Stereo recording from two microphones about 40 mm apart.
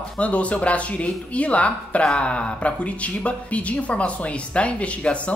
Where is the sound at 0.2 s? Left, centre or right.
Left.